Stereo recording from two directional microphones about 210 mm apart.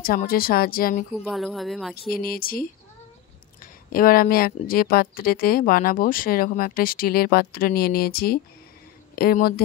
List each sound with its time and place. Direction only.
0.0 s speech: 45° left (ahead or behind)
1.1 s speech: centre (ahead or behind)
2.0 s speech: 45° left (ahead or behind)
3.9 s speech: 45° left (ahead or behind)